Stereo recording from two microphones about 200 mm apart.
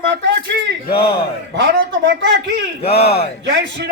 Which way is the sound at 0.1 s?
60° right (ahead or behind).